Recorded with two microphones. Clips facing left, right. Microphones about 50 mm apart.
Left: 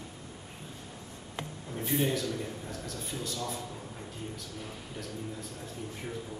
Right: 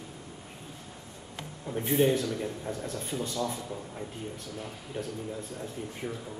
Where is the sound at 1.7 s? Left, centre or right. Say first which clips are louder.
Right 5 dB; right.